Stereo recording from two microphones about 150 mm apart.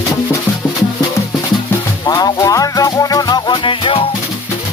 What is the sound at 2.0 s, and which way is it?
Music, 25° left (ahead or behind).